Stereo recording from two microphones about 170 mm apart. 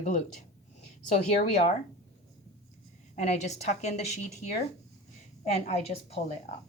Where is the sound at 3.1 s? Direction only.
40° left (ahead or behind).